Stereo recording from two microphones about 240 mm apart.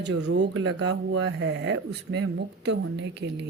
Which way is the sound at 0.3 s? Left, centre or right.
Right.